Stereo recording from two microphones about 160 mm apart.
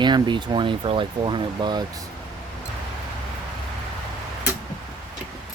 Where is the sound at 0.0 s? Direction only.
30° right (ahead or behind).